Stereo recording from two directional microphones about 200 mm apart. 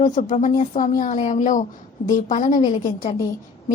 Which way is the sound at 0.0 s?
35° left (ahead or behind).